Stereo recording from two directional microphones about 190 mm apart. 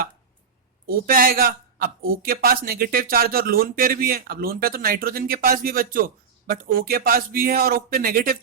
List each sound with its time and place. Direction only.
0.9 s a man's voice: 50° right (ahead or behind)